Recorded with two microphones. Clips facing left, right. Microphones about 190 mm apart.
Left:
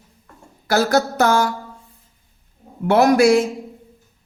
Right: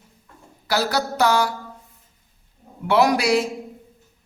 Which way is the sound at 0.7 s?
50° left (ahead or behind).